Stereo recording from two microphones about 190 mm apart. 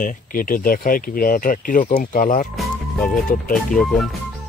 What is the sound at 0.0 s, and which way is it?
Speech, 45° left (ahead or behind).